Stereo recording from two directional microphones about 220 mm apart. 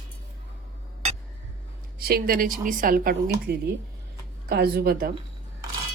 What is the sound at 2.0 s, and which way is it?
A woman's voice, 40° right (ahead or behind).